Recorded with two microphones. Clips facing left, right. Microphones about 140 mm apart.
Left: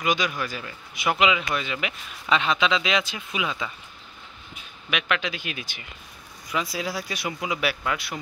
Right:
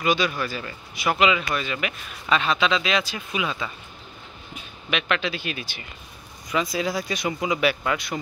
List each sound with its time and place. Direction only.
0.0 s speech: 15° left (ahead or behind)
1.5 s speech: 20° left (ahead or behind)
4.9 s speech: 10° left (ahead or behind)